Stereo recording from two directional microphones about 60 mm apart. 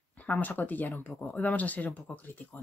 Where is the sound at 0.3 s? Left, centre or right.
Left.